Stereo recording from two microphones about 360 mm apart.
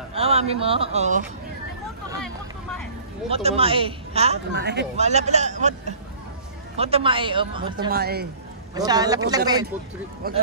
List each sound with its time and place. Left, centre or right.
0.1 s speech: centre
3.3 s speech: centre
4.5 s speech: right
7.9 s speech: right
8.7 s speech: centre
10.2 s speech: right